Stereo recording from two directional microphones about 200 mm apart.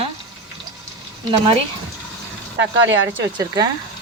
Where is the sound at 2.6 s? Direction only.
65° right (ahead or behind).